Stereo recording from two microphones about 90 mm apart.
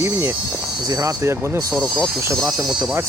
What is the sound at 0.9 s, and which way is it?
Speech, 40° right (ahead or behind).